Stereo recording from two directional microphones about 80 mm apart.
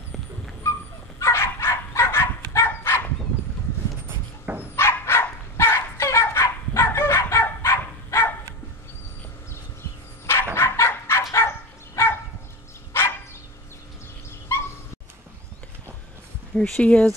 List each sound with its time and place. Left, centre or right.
1.2 s dog: left
4.1 s dog: centre
4.7 s dog: left
10.5 s dog: left
14.5 s dog: left
16.5 s speech: centre